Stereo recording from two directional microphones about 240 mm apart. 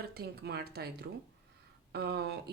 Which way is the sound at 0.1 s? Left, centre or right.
Right.